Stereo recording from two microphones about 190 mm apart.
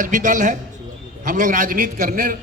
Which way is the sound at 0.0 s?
40° right (ahead or behind).